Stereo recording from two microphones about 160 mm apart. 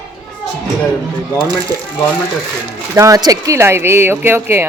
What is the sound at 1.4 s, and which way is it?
Speech, 25° right (ahead or behind).